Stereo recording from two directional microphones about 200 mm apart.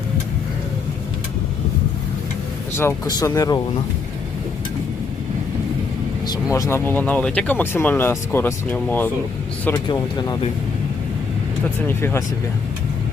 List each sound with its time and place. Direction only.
2.7 s speech: 15° left (ahead or behind)
6.2 s speech: 20° left (ahead or behind)
9.9 s speech: 20° left (ahead or behind)
11.9 s speech: 10° left (ahead or behind)